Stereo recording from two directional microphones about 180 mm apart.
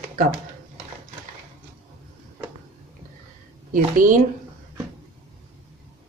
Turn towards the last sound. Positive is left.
turn(degrees=-50)  # may be behind; listen again after turning